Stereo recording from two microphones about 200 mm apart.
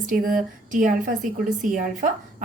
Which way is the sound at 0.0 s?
45° right (ahead or behind).